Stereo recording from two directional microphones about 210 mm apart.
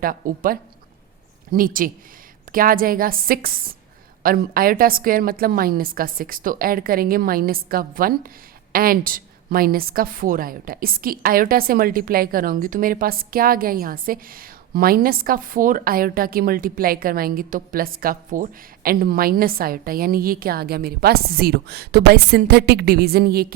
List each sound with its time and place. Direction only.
0.0 s a woman's voice: 45° right (ahead or behind)